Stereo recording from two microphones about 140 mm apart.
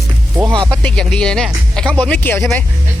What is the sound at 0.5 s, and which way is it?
Speech, 5° left (ahead or behind).